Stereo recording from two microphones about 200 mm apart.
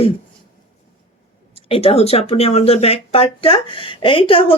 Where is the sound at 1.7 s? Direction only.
30° left (ahead or behind).